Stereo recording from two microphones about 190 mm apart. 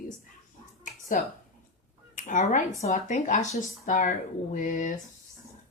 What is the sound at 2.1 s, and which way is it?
Speech, 40° left (ahead or behind).